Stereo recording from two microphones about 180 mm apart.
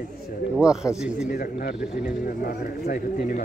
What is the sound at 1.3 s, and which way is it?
A man's voice, 55° left (ahead or behind).